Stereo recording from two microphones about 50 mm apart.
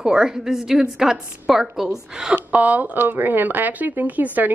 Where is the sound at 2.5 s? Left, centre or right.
Right.